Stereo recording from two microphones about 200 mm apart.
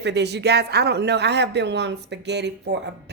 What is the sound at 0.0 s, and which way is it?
A woman's voice, 55° right (ahead or behind).